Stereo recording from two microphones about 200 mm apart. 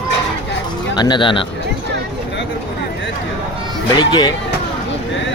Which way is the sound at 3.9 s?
20° left (ahead or behind).